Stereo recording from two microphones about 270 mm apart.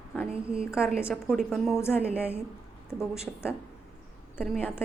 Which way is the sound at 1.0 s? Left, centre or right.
Centre.